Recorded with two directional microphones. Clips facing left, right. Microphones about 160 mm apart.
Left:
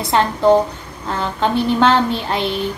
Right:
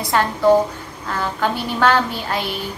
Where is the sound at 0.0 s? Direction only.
25° left (ahead or behind).